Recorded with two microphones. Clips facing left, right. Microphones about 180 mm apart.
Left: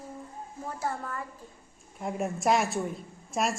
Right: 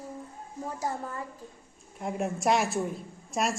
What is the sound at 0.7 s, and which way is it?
Speech, 20° right (ahead or behind).